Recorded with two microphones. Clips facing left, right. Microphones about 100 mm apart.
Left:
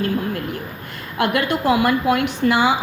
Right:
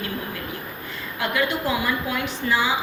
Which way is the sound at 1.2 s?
60° left (ahead or behind).